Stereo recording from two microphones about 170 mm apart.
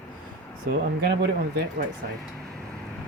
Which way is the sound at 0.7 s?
70° right (ahead or behind).